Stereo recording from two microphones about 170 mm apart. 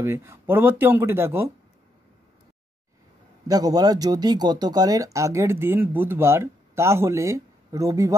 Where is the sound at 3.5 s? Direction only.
20° right (ahead or behind).